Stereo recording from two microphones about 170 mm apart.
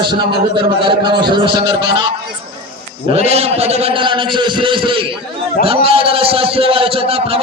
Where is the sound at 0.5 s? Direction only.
30° right (ahead or behind).